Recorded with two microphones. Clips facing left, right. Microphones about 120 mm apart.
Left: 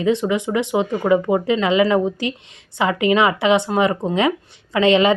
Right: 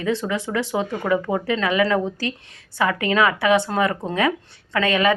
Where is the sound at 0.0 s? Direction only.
20° left (ahead or behind).